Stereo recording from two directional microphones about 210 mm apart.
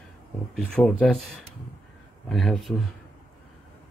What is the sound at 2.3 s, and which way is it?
Speech, centre (ahead or behind).